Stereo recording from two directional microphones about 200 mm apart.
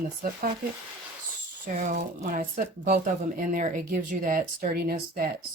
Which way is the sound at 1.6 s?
40° right (ahead or behind).